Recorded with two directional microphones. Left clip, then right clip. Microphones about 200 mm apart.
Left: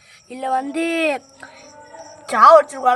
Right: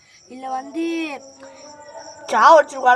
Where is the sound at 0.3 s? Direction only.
35° left (ahead or behind).